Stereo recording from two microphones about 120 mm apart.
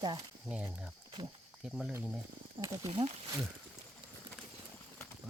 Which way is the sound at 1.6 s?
5° right (ahead or behind).